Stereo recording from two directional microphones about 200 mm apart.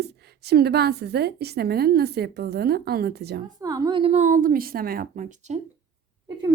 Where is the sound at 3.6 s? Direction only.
15° right (ahead or behind); by 5.5 s 40° right (ahead or behind).